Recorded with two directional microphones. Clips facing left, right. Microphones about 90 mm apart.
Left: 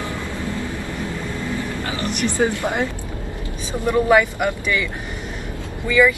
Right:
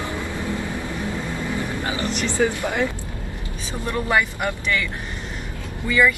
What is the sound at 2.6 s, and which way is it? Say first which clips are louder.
Speech: left 1 dB; 20° left (ahead or behind).